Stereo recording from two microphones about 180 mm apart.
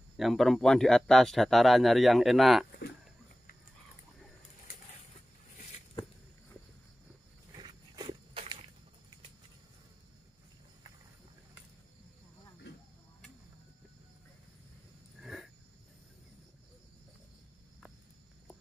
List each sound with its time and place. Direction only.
0.2 s speech: centre (ahead or behind)
7.5 s dog: 25° right (ahead or behind)
15.1 s a sound: centre (ahead or behind)